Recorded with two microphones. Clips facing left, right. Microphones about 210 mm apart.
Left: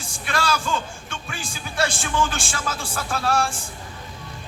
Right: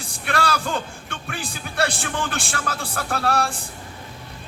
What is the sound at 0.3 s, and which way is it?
Music, 60° right (ahead or behind).